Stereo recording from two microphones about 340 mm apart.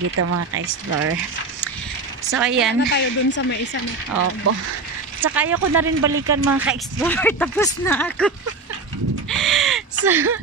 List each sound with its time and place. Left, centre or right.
0.1 s speech: right
2.3 s speech: centre
2.9 s speech: left
4.5 s speech: right
5.2 s speech: centre
6.1 s speech: right
6.6 s speech: centre
9.3 s a sound: centre